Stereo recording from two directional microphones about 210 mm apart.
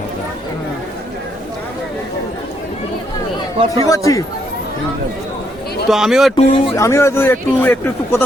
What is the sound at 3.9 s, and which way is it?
Speech, 15° left (ahead or behind).